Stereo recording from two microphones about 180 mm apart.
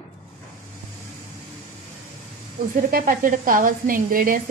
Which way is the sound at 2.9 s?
55° right (ahead or behind).